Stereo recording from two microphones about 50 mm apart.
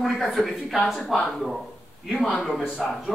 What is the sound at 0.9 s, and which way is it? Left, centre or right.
A woman's voice, centre.